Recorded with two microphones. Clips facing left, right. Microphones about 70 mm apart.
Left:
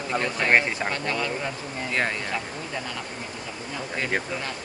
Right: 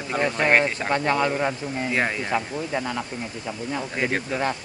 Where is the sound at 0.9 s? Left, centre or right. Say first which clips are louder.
Right 6 dB; right.